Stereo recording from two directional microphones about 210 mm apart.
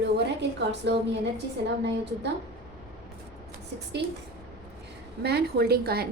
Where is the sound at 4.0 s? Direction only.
55° right (ahead or behind).